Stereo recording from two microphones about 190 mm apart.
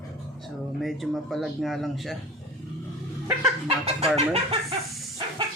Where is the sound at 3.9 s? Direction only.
35° right (ahead or behind).